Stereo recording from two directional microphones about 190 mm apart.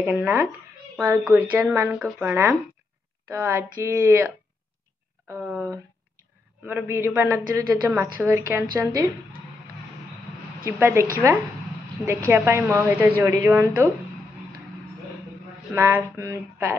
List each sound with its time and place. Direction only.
0.0 s a woman's voice: 10° right (ahead or behind)
1.9 s a woman's voice: centre (ahead or behind)
5.3 s a woman's voice: 10° right (ahead or behind)
10.6 s a woman's voice: 10° right (ahead or behind)
12.3 s a woman's voice: 10° right (ahead or behind)
15.7 s a woman's voice: 15° right (ahead or behind)